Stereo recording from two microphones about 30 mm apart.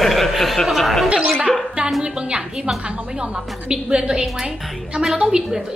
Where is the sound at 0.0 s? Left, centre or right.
Centre.